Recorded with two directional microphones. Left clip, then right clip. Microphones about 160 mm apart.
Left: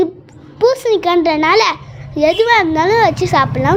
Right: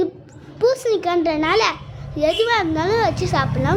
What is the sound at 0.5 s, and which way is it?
A child's voice, 30° left (ahead or behind).